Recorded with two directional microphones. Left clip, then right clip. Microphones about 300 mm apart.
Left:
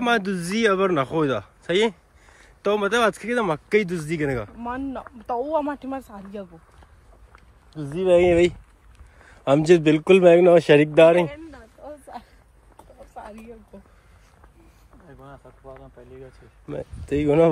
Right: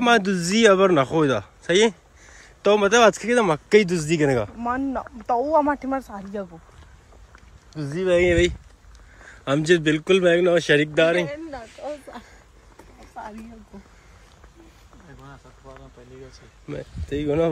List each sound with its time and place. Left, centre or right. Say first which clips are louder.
0.0 s a man's voice: right 4 dB; centre
5.9 s speech: right 5 dB; centre
7.9 s speech: left 2 dB; centre
13.2 s a sound: right 3 dB; centre
17.1 s speech: left 4 dB; left